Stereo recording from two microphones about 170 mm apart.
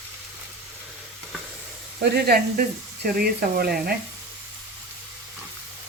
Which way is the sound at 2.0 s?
70° right (ahead or behind).